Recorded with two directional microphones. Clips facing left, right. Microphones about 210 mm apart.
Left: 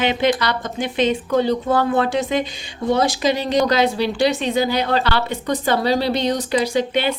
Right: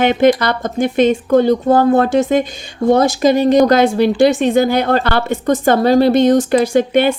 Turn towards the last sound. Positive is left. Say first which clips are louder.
# right 7 dB
turn(degrees=-50)  # may be behind; listen again after turning